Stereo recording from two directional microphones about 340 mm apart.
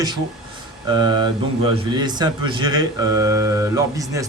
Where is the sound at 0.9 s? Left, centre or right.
Centre.